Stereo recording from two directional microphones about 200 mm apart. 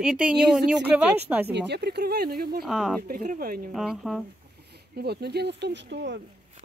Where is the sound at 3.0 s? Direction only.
40° right (ahead or behind).